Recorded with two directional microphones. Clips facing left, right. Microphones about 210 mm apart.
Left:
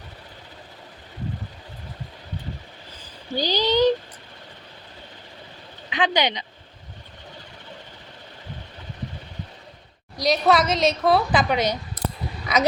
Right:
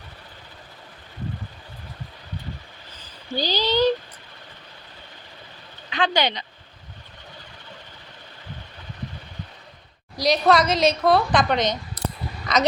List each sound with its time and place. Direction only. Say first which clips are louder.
3.3 s speech: left 1 dB; 15° left (ahead or behind)
5.9 s speech: even; 15° left (ahead or behind)
10.2 s a woman's voice: right 1 dB; centre (ahead or behind)